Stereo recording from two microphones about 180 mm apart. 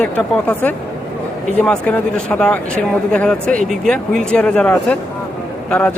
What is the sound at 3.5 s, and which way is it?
Speech, 45° right (ahead or behind).